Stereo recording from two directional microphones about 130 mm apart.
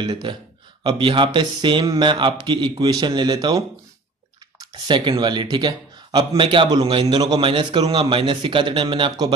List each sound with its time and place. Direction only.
0.0 s speech: 35° right (ahead or behind)
4.8 s speech: 35° right (ahead or behind)